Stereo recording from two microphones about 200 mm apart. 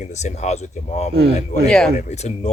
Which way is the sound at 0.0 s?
35° left (ahead or behind).